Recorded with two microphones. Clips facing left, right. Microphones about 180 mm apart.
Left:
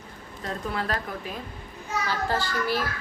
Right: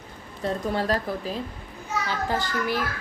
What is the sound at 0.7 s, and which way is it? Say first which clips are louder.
Speech: right 4 dB; 35° right (ahead or behind).